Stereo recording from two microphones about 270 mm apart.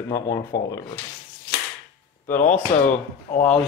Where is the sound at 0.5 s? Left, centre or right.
Left.